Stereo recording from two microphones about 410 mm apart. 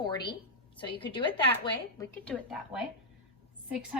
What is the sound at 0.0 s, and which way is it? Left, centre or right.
A woman's voice, centre.